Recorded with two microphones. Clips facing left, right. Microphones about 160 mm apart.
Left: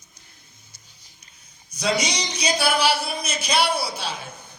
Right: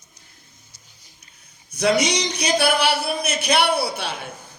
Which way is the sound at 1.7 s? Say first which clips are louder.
Right 5 dB; 60° right (ahead or behind).